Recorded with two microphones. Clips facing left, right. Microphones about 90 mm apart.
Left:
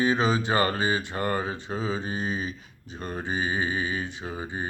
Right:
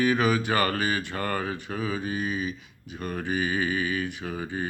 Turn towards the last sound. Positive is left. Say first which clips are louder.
# right 1 dB
turn(degrees=25)  # may be behind; listen again after turning